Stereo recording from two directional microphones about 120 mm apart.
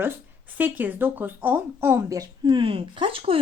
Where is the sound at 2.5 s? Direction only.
50° right (ahead or behind).